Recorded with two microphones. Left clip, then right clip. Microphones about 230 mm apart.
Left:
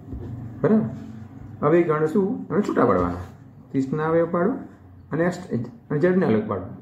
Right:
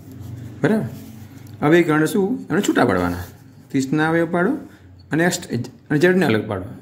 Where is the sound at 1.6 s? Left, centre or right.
Right.